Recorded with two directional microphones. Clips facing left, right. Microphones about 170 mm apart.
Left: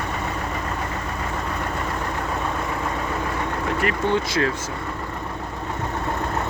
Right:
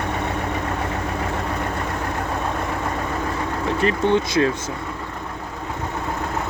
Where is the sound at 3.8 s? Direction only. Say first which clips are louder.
Right 4 dB; 20° right (ahead or behind).